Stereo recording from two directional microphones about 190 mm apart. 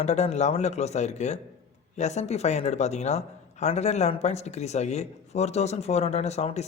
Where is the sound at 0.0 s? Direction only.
35° left (ahead or behind).